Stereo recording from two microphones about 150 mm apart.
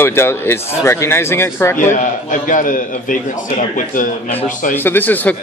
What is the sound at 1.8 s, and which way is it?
A man's voice, 55° left (ahead or behind).